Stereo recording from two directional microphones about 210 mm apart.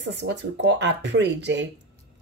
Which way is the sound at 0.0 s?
55° right (ahead or behind).